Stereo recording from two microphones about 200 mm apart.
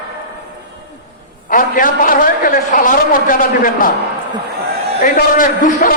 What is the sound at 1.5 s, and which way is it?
A man's voice, 45° left (ahead or behind).